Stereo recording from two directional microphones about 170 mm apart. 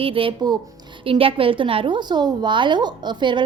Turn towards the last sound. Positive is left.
turn(degrees=-25)  # may be behind; listen again after turning